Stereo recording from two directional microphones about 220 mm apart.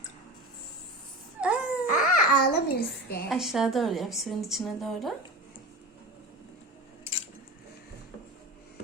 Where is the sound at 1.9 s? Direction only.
40° left (ahead or behind).